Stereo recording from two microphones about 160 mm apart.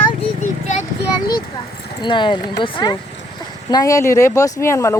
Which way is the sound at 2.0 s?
30° left (ahead or behind).